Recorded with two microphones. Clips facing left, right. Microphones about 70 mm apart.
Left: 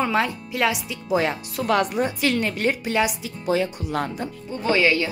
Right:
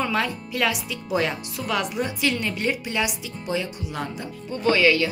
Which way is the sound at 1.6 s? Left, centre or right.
Left.